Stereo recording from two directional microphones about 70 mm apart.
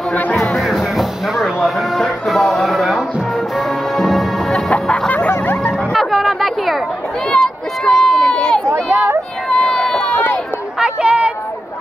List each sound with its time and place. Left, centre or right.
0.1 s music: left
0.4 s music: centre
4.6 s chicken: centre
5.7 s music: centre
7.2 s run: centre
8.6 s a sound: right
9.5 s run: centre
11.0 s chatter: centre